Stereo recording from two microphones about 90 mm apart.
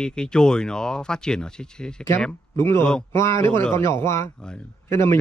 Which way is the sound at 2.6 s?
25° left (ahead or behind).